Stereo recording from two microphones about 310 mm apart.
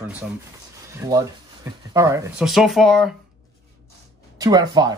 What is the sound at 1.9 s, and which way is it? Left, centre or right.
Speech, centre.